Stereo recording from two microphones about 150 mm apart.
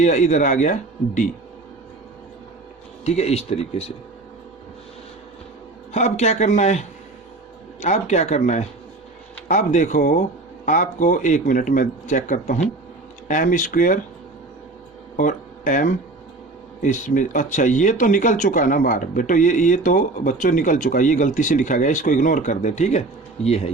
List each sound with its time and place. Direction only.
0.0 s speech: 55° left (ahead or behind)
3.0 s speech: 45° left (ahead or behind)
5.9 s speech: 50° left (ahead or behind)
15.1 s speech: 60° left (ahead or behind); by 23.7 s 45° left (ahead or behind)